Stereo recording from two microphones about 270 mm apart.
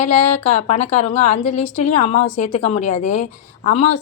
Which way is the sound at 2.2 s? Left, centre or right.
Left.